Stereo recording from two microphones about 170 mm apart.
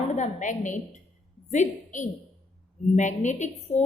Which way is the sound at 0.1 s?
45° left (ahead or behind).